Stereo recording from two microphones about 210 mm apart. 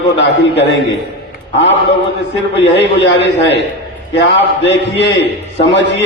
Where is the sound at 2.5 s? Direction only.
55° left (ahead or behind).